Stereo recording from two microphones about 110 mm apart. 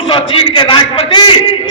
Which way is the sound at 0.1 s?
50° left (ahead or behind).